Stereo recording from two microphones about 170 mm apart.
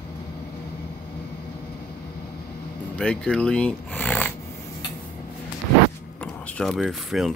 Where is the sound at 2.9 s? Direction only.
5° left (ahead or behind).